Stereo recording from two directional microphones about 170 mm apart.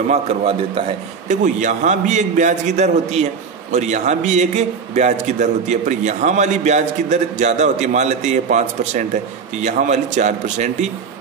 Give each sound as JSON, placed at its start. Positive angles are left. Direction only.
{"t": 0.1, "sound": "a man's voice", "side_deg": -35}
{"t": 1.3, "sound": "a man's voice", "side_deg": -45}